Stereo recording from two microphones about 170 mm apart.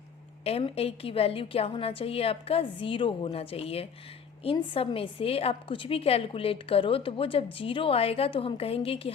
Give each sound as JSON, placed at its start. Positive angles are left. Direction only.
{"t": 0.4, "sound": "a woman's voice", "side_deg": 35}